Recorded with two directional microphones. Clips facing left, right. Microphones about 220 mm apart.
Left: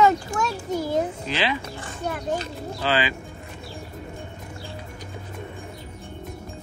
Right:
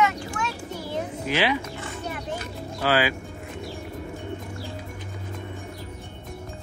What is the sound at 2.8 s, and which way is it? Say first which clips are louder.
Speech: right 2 dB; 10° right (ahead or behind).